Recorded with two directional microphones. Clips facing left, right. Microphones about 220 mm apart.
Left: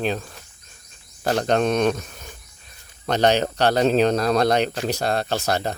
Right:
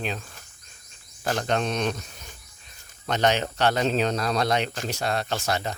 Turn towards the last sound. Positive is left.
turn(degrees=35)  # may be behind; listen again after turning